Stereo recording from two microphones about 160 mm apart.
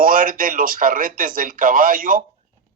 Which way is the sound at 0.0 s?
60° right (ahead or behind).